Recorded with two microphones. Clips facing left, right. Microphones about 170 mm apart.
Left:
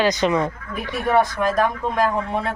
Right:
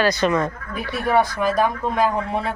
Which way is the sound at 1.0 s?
Centre (ahead or behind).